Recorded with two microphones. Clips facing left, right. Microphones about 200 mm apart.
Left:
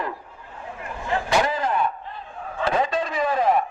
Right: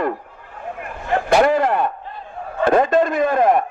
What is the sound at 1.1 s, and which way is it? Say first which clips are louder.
Vehicle: right 8 dB; 55° right (ahead or behind).